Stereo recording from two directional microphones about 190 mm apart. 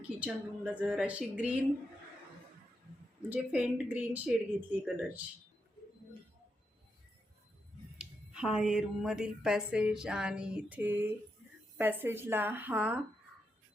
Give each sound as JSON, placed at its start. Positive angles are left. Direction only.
{"t": 0.2, "sound": "a woman's voice", "side_deg": -5}
{"t": 3.2, "sound": "a woman's voice", "side_deg": -10}
{"t": 7.9, "sound": "a woman's voice", "side_deg": -5}